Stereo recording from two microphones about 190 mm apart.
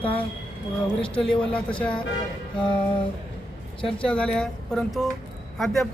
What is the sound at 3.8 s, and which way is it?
Speech, 5° left (ahead or behind).